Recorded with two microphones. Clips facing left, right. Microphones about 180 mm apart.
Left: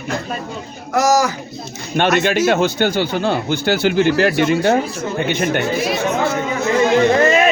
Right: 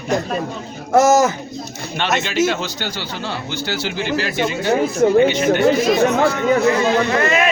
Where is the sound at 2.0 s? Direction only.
50° left (ahead or behind).